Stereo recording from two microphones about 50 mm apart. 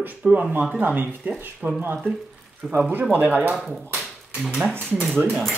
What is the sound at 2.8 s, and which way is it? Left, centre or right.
Speech, right.